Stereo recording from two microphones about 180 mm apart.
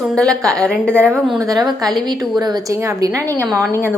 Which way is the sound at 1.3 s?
20° right (ahead or behind).